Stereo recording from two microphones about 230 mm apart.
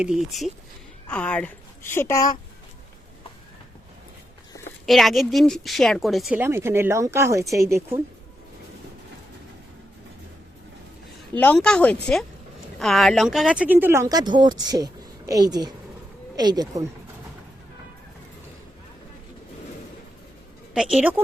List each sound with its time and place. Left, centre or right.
0.0 s a woman's voice: centre
4.9 s a woman's voice: centre
11.3 s a woman's voice: centre
20.7 s a woman's voice: centre